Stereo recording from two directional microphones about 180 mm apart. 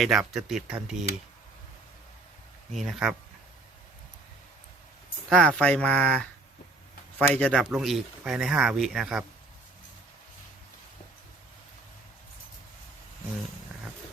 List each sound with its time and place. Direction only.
0.0 s speech: centre (ahead or behind)
2.7 s speech: centre (ahead or behind)
5.3 s speech: 5° left (ahead or behind)